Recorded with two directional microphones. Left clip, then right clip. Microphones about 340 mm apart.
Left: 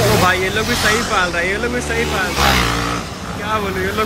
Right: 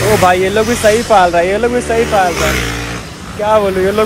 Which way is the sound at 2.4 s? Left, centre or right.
Centre.